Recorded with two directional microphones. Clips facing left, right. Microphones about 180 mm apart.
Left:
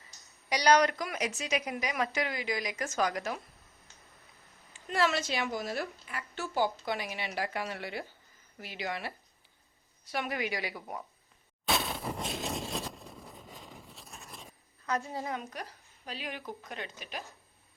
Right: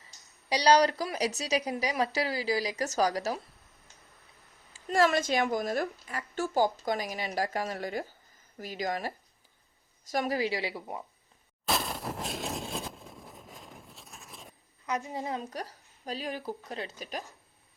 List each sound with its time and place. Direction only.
0.5 s a woman's voice: 30° right (ahead or behind)
4.9 s a woman's voice: 45° right (ahead or behind); by 11.0 s 25° right (ahead or behind)
11.6 s a sound: centre (ahead or behind)
14.8 s a woman's voice: 15° right (ahead or behind); by 17.2 s 40° right (ahead or behind)